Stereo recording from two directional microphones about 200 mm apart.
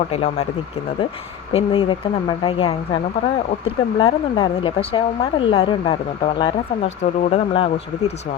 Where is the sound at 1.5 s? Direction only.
25° left (ahead or behind).